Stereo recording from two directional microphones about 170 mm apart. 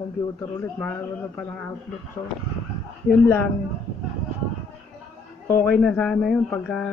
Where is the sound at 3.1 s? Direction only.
10° left (ahead or behind).